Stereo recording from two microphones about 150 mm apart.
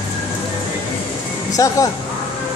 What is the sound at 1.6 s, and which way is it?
Speech, 20° left (ahead or behind).